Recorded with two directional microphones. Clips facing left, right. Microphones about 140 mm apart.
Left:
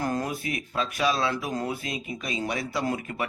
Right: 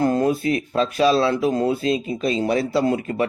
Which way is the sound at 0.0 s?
30° right (ahead or behind).